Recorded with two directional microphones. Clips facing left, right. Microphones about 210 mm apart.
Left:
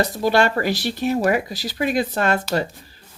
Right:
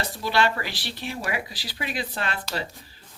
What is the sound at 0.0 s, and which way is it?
Speech, 45° left (ahead or behind).